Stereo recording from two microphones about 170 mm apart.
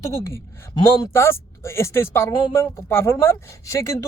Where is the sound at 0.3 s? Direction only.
15° left (ahead or behind).